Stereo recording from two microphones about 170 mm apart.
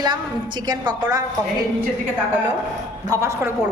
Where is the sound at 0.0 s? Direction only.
25° right (ahead or behind).